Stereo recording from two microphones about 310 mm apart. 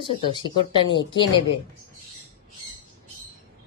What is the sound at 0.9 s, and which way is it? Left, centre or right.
Speech, centre.